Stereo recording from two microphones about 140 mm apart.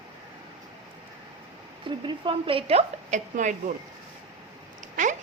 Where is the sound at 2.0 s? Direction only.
40° right (ahead or behind); by 3.5 s 60° right (ahead or behind).